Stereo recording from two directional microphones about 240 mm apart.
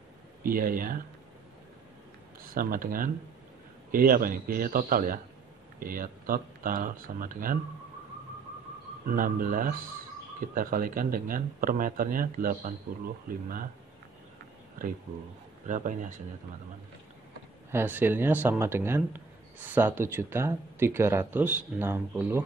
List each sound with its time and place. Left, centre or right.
0.4 s speech: right
2.4 s speech: right
9.0 s speech: right
15.6 s speech: right
17.6 s speech: centre